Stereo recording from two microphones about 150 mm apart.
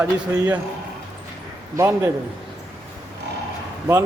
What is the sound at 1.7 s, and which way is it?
Speech, 20° right (ahead or behind).